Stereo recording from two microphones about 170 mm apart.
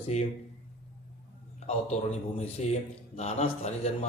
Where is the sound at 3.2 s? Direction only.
40° left (ahead or behind).